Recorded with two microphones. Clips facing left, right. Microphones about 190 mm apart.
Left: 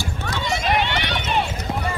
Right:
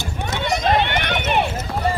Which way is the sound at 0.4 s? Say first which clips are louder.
Right 3 dB; 55° right (ahead or behind).